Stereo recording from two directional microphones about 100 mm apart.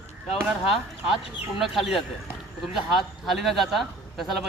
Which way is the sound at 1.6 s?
Centre (ahead or behind).